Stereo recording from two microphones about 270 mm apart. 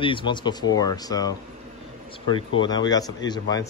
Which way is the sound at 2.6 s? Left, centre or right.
Centre.